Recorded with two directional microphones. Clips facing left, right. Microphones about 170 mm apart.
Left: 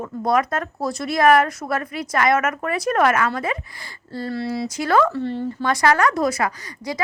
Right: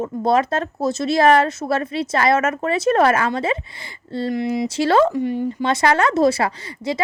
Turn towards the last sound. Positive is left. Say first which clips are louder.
# right 4 dB
turn(degrees=-25)  # may be behind; listen again after turning